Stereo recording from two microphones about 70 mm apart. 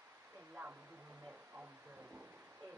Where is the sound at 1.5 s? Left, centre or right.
Right.